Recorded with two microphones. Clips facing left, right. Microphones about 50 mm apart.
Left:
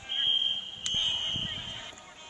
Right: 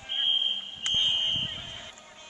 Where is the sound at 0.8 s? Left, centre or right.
Right.